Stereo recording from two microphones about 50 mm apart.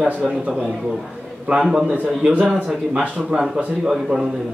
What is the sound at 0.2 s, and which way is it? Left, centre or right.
Speech, centre.